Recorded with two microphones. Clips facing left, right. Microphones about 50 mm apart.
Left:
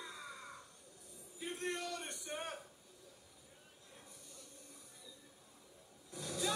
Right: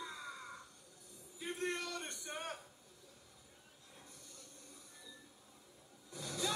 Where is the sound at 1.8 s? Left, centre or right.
Centre.